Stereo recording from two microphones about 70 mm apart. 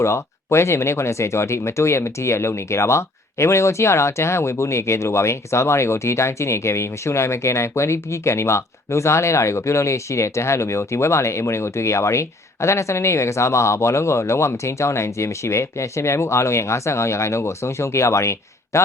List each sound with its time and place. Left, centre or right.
0.0 s speech: left